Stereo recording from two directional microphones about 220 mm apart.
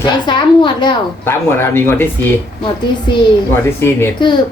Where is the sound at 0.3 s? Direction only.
20° left (ahead or behind).